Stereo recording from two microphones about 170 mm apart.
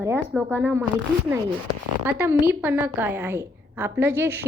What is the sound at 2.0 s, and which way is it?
A woman's voice, 10° right (ahead or behind).